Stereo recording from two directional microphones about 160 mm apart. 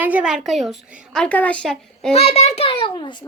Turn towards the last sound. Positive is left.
turn(degrees=30)  # may be behind; listen again after turning